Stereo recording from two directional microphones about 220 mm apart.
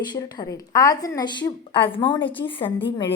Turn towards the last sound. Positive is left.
turn(degrees=20)  # may be behind; listen again after turning